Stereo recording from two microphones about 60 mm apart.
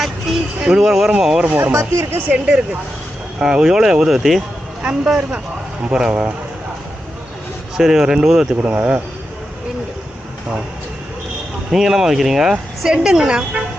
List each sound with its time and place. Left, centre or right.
0.0 s speech: centre
1.7 s speech: right
3.4 s speech: centre
7.8 s speech: centre
8.6 s speech: right
11.7 s speech: centre